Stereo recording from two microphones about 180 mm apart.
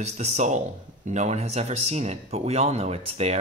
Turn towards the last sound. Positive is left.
turn(degrees=-35)  # may be behind; listen again after turning